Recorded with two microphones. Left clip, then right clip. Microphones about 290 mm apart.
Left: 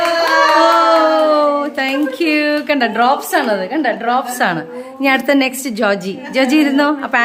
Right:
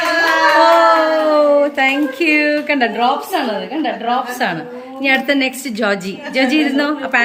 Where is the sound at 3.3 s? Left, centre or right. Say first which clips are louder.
Left 3 dB; centre.